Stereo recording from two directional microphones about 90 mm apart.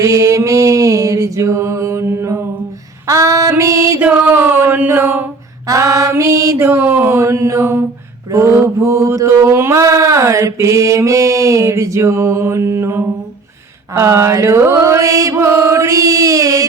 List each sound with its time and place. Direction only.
0.0 s mantra: 35° right (ahead or behind)
3.1 s female singing: 35° right (ahead or behind)
3.5 s music: 35° right (ahead or behind)
4.0 s a sound: 25° right (ahead or behind)
5.6 s mantra: 35° right (ahead or behind)